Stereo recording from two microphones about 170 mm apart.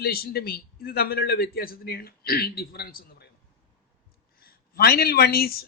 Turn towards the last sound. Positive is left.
turn(degrees=65)  # may be behind; listen again after turning